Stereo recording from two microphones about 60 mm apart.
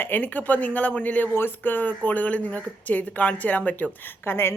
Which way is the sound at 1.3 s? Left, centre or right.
Left.